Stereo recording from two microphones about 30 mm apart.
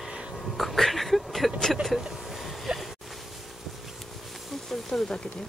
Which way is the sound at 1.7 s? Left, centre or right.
Centre.